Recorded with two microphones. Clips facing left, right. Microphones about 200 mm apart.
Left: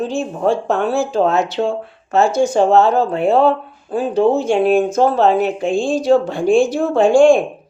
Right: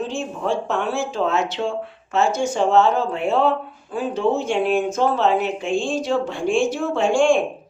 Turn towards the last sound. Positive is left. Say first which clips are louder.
# left 7 dB
turn(degrees=35)  # may be behind; listen again after turning